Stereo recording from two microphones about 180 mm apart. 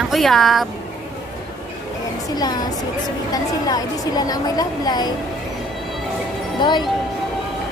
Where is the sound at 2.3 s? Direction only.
20° left (ahead or behind).